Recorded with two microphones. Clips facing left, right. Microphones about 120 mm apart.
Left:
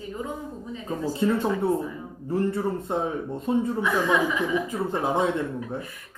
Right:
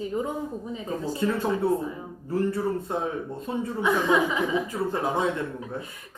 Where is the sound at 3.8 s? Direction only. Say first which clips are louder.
Right 1 dB; 20° right (ahead or behind).